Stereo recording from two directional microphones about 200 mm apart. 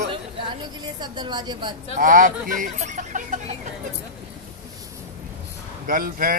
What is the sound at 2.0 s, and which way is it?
A man's voice, 40° right (ahead or behind).